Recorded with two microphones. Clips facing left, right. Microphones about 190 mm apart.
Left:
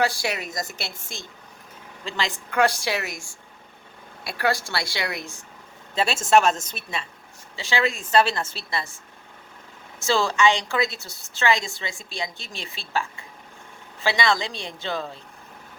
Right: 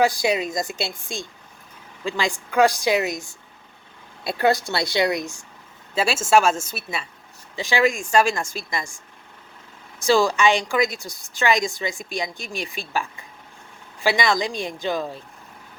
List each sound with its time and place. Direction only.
0.0 s a woman's voice: 15° right (ahead or behind)
2.0 s a woman's voice: 15° right (ahead or behind)
10.0 s a woman's voice: 15° right (ahead or behind)
14.2 s a woman's voice: 15° right (ahead or behind)